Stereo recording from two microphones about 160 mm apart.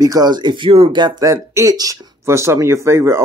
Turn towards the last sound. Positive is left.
turn(degrees=-15)  # may be behind; listen again after turning